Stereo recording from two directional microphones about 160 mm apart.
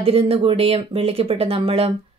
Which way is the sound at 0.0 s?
35° right (ahead or behind).